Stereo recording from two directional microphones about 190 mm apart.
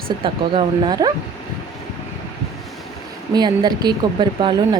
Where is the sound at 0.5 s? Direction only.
20° right (ahead or behind).